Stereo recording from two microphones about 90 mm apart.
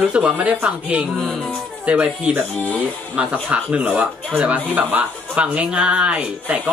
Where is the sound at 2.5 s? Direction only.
15° left (ahead or behind).